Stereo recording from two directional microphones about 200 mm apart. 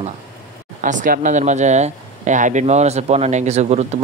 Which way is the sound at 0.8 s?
40° right (ahead or behind).